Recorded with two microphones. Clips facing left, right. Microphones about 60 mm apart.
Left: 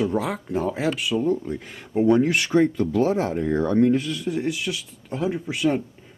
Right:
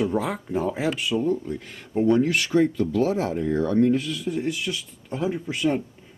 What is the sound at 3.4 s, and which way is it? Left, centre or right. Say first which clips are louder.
Speech: left 1 dB; left.